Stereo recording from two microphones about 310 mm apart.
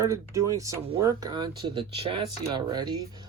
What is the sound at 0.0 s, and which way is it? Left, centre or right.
Speech, centre.